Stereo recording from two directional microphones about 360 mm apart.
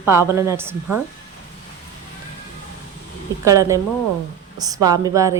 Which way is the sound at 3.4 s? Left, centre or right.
Centre.